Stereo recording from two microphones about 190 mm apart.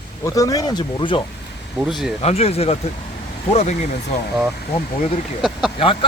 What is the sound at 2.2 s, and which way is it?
Speech, 35° left (ahead or behind).